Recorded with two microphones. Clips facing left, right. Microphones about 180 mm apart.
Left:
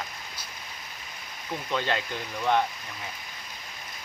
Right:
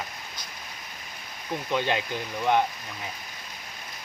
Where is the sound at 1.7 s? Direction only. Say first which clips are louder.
Right 2 dB; 15° right (ahead or behind).